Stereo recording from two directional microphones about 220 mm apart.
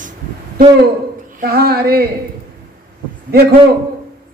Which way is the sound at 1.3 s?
45° right (ahead or behind).